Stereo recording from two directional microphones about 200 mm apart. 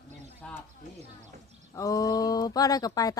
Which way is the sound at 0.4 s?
5° left (ahead or behind).